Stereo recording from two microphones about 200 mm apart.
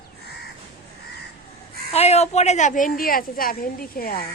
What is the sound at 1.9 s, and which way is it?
A woman's voice, 30° left (ahead or behind).